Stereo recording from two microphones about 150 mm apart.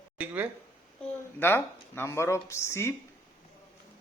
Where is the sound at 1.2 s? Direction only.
15° left (ahead or behind).